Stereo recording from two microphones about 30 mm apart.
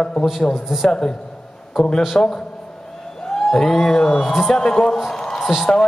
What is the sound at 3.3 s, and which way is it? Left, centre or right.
A man's voice, centre.